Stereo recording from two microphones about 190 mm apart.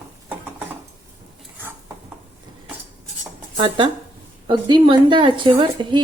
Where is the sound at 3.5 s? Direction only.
25° right (ahead or behind).